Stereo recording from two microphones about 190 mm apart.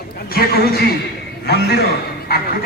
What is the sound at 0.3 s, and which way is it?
Speech, 50° left (ahead or behind).